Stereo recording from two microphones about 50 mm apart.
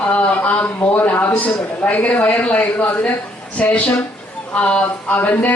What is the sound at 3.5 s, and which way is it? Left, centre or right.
A man's voice, left.